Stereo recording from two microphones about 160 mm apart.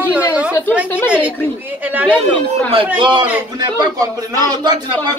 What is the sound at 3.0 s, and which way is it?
A man's voice, 30° right (ahead or behind).